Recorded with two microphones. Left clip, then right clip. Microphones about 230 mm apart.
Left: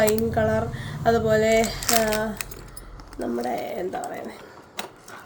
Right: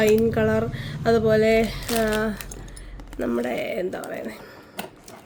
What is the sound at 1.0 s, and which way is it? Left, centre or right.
Speech, right.